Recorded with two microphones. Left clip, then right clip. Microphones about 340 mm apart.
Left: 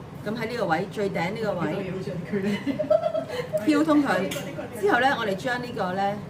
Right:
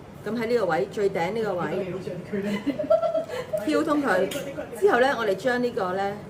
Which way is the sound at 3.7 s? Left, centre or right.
Centre.